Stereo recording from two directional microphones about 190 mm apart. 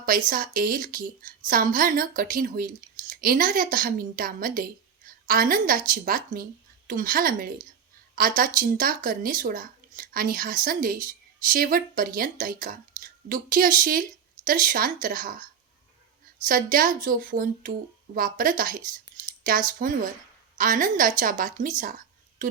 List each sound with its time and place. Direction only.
0.3 s a woman's voice: 45° right (ahead or behind)
16.5 s a woman's voice: 45° right (ahead or behind)